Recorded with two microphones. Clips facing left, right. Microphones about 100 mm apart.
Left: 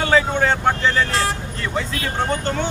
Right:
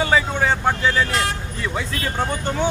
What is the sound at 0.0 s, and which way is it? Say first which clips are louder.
Speech: left 2 dB; 5° right (ahead or behind).